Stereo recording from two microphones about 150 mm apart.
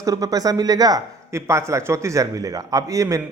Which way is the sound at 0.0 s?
25° right (ahead or behind).